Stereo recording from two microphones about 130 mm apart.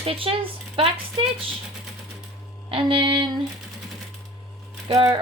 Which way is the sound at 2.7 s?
40° right (ahead or behind).